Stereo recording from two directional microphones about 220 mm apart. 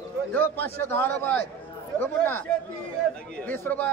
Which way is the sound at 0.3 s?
10° left (ahead or behind).